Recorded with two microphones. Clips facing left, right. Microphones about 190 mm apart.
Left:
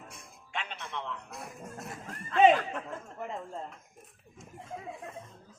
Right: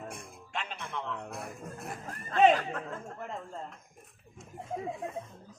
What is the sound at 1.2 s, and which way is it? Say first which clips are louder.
Speech: right 3 dB; 55° right (ahead or behind).